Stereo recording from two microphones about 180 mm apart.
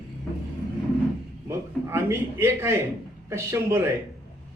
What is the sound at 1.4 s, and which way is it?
A man's voice, 15° right (ahead or behind).